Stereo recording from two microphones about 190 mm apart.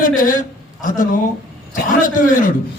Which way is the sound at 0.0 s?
45° left (ahead or behind).